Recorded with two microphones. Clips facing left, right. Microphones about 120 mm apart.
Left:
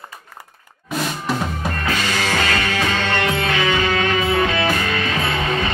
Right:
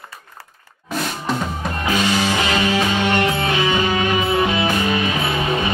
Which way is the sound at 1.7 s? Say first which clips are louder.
Right 5 dB; 15° right (ahead or behind).